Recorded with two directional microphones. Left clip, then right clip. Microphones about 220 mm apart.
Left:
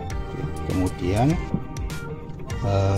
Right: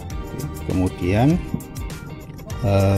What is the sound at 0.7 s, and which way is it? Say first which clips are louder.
Speech: right 3 dB; centre (ahead or behind).